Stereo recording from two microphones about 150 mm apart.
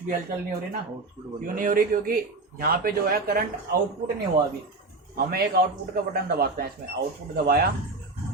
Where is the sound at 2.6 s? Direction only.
85° right.